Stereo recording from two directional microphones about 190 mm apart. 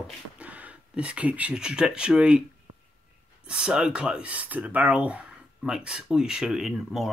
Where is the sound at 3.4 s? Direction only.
5° right (ahead or behind).